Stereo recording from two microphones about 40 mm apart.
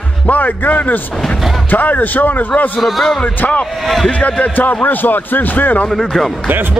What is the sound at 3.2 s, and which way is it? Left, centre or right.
Speech, left.